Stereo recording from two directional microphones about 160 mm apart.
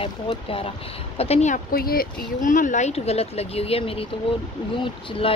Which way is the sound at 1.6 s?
70° left (ahead or behind).